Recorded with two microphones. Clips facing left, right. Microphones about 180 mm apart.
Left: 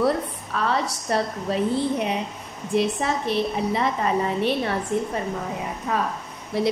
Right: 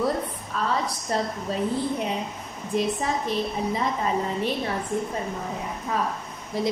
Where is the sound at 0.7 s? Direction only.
70° left (ahead or behind).